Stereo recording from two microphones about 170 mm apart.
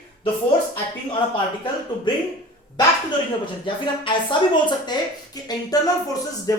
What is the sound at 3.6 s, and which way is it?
A woman's voice, 30° left (ahead or behind).